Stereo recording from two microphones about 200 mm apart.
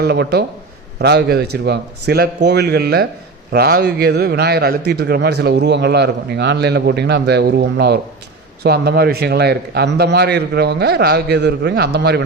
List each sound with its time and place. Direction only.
0.0 s a man's voice: 55° right (ahead or behind)